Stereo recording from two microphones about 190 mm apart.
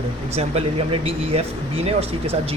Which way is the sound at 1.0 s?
30° right (ahead or behind).